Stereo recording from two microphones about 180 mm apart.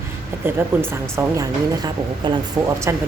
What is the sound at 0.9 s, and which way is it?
A woman's voice, 15° right (ahead or behind).